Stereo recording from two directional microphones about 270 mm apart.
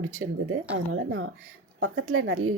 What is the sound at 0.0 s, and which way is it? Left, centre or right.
A woman's voice, right.